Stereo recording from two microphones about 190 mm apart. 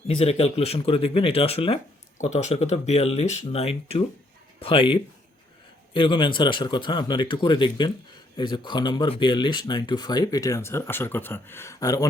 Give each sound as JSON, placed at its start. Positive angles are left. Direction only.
{"t": 0.1, "sound": "speech", "side_deg": 30}